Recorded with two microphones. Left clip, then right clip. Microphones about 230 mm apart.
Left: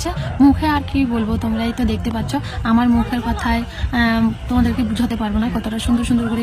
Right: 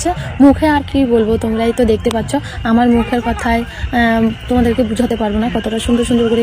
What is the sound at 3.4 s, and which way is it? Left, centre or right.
Speech, centre.